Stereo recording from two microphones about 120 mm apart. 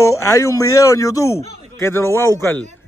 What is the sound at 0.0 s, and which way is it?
A man's voice, 25° left (ahead or behind).